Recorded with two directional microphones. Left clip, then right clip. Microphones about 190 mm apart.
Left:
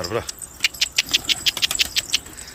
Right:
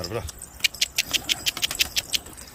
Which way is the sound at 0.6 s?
5° right (ahead or behind).